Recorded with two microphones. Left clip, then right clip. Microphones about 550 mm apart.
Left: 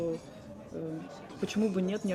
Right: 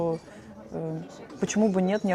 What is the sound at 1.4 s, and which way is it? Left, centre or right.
Speech, right.